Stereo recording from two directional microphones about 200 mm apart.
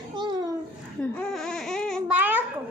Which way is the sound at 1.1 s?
Centre (ahead or behind).